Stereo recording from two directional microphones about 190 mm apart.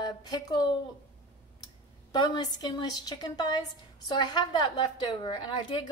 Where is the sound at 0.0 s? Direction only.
20° left (ahead or behind).